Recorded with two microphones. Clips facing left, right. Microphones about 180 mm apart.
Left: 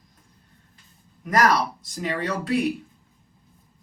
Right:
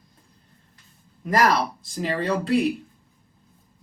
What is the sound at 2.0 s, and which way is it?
Speech, 30° right (ahead or behind).